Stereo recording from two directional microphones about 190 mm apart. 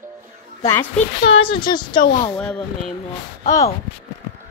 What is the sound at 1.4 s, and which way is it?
Speech, 25° left (ahead or behind).